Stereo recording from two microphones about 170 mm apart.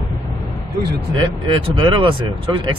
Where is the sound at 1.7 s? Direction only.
30° right (ahead or behind).